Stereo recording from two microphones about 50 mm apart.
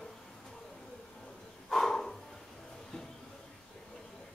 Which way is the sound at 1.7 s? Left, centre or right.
Centre.